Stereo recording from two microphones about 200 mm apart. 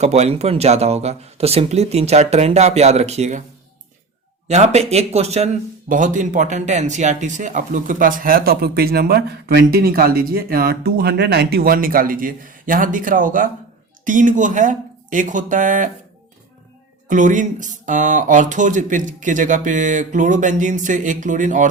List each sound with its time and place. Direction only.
0.0 s speech: 35° right (ahead or behind)
4.4 s speech: 35° right (ahead or behind)
17.1 s speech: 40° right (ahead or behind)